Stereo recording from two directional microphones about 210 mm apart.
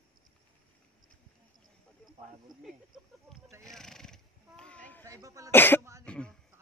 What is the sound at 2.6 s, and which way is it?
Speech, centre (ahead or behind).